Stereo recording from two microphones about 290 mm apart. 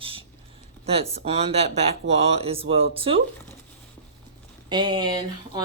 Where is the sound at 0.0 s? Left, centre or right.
Centre.